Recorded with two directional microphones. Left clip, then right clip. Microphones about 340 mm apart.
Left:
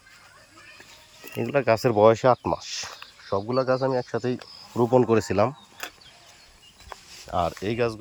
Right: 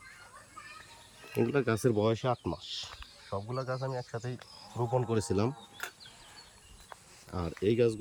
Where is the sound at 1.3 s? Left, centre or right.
Centre.